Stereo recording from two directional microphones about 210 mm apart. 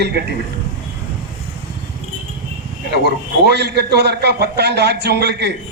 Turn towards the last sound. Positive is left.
turn(degrees=-50)  # may be behind; listen again after turning